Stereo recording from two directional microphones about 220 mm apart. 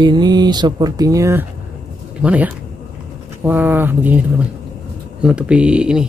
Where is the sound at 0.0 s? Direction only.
20° right (ahead or behind).